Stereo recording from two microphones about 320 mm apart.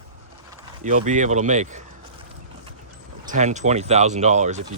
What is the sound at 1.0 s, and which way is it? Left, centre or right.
Speech, right.